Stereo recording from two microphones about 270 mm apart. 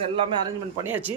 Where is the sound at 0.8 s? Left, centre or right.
Centre.